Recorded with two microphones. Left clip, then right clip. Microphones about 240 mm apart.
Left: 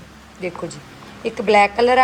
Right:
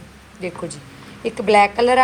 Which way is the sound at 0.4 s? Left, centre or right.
Centre.